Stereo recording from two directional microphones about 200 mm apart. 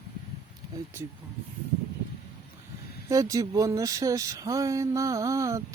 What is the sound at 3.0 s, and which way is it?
Speech, 15° right (ahead or behind).